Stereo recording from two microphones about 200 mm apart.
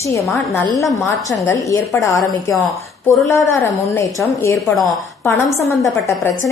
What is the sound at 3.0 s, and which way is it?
Speech, 15° left (ahead or behind).